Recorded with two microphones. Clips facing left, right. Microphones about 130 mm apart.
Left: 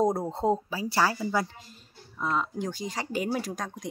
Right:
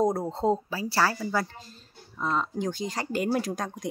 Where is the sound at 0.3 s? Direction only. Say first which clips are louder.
Right 1 dB; 15° left (ahead or behind).